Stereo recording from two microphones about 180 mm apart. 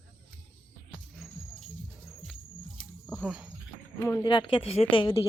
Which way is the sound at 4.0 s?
15° left (ahead or behind).